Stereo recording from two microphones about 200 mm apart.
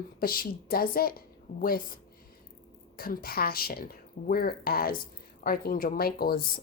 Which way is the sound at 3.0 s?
50° left (ahead or behind).